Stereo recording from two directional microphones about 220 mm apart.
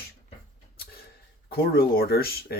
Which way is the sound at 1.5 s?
45° left (ahead or behind).